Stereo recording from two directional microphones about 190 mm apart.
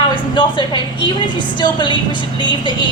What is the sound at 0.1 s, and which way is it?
Speech, 25° left (ahead or behind).